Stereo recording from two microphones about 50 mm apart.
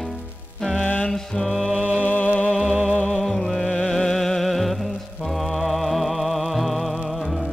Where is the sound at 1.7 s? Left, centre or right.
Centre.